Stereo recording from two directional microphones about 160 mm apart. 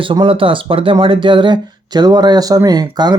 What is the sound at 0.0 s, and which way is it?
Speech, 30° right (ahead or behind).